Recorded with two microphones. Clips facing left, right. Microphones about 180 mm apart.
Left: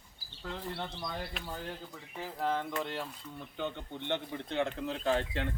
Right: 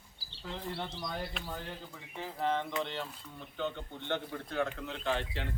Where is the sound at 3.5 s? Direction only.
15° left (ahead or behind); by 5.4 s 40° left (ahead or behind).